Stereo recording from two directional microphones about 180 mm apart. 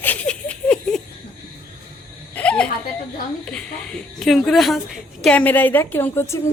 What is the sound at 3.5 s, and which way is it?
A woman's voice, 5° left (ahead or behind).